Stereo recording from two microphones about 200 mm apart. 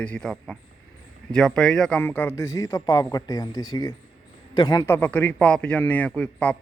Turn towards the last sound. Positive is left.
turn(degrees=5)  # may be behind; listen again after turning